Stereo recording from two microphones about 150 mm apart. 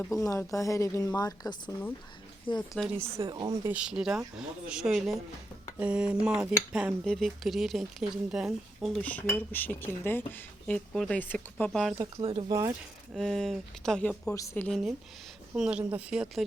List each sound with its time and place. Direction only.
0.1 s speech: 20° left (ahead or behind)
2.6 s speech: centre (ahead or behind)
3.2 s speech: 30° right (ahead or behind)
3.6 s speech: 10° right (ahead or behind)
12.1 s speech: 35° right (ahead or behind)
13.1 s speech: 5° left (ahead or behind)
14.3 s speech: 15° left (ahead or behind)
14.7 s speech: centre (ahead or behind)